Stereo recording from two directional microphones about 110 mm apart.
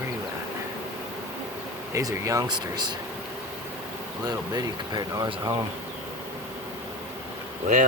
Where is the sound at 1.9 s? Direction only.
30° right (ahead or behind).